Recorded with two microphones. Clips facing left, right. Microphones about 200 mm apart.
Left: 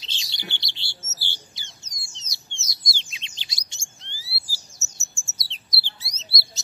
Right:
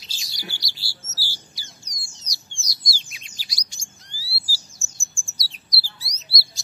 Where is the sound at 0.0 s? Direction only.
25° left (ahead or behind).